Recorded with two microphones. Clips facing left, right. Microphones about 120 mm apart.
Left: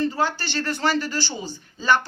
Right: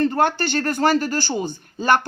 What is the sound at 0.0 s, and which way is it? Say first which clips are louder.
Speech: right 5 dB; 60° right (ahead or behind).